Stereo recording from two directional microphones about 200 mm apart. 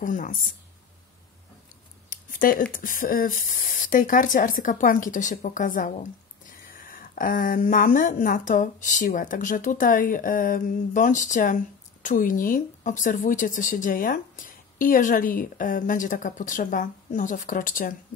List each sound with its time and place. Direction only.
0.0 s speech: 40° left (ahead or behind)
2.0 s speech: 45° left (ahead or behind)